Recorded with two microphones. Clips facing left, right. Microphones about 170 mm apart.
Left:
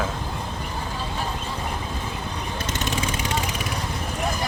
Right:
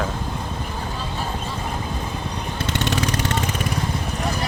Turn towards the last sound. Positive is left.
turn(degrees=-75)  # may be behind; listen again after turning